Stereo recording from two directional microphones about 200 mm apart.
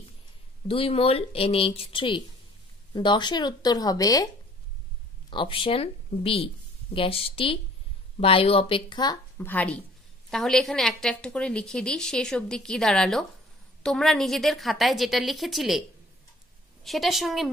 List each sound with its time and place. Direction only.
0.7 s speech: 30° left (ahead or behind)
5.3 s speech: 25° left (ahead or behind)
9.5 s a woman's voice: 10° left (ahead or behind)
16.8 s a woman's voice: centre (ahead or behind)